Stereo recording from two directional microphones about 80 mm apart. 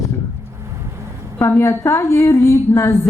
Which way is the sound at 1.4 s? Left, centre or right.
Left.